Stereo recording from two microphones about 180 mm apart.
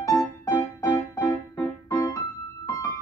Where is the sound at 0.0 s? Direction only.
15° left (ahead or behind).